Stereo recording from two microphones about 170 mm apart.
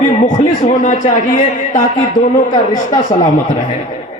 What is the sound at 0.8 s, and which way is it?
Speech, 50° left (ahead or behind).